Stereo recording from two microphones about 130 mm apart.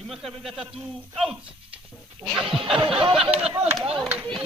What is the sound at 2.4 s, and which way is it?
A man's voice, 5° right (ahead or behind).